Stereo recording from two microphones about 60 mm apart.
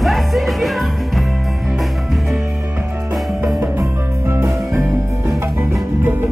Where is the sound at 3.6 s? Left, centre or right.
Right.